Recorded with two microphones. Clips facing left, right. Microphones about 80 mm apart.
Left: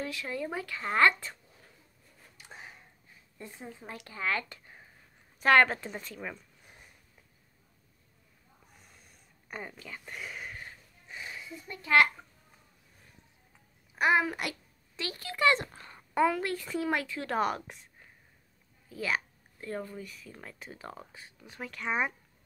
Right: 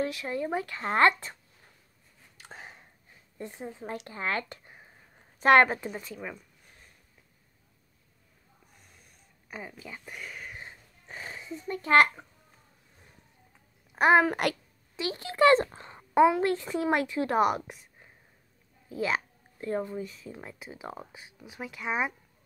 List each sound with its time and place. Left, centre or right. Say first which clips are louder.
0.0 s a child's voice: right 5 dB; right
2.4 s a sound: right 2 dB; right
3.3 s a child's voice: right 6 dB; right
5.7 s speech: right 3 dB; centre
8.7 s a sound: even; centre
9.8 s speech: right 1 dB; centre
10.2 s a sound: left 2 dB; centre
10.5 s cat: right 1 dB; right
11.1 s a sound: right 3 dB; right
11.7 s a child's voice: right 3 dB; right
13.9 s a child's voice: right 5 dB; right
15.0 s a child's voice: right 7 dB; right
18.9 s speech: right 3 dB; right; by 22.1 s centre